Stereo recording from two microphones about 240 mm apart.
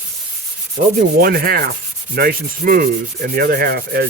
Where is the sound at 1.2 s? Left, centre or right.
Right.